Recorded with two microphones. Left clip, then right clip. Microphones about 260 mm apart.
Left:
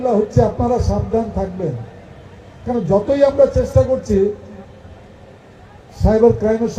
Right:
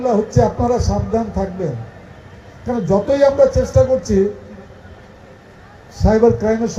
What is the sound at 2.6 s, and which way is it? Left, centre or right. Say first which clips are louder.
Speech: even; right.